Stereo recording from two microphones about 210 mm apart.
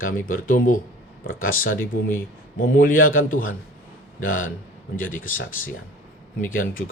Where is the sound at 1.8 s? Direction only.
10° left (ahead or behind).